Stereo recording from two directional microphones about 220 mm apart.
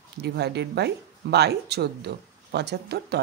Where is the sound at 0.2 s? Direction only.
50° right (ahead or behind).